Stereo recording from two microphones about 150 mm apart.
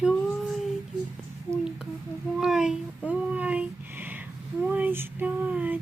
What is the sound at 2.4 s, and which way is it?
Speech, 5° right (ahead or behind).